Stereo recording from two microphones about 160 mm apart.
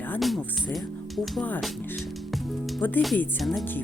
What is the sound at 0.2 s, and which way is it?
Speech, centre (ahead or behind).